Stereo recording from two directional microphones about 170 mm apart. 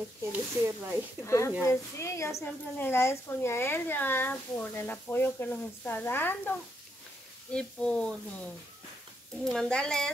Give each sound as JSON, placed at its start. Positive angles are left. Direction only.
{"t": 0.3, "sound": "speech", "side_deg": -10}
{"t": 1.2, "sound": "speech", "side_deg": 15}
{"t": 7.5, "sound": "speech", "side_deg": 5}
{"t": 9.4, "sound": "speech", "side_deg": 5}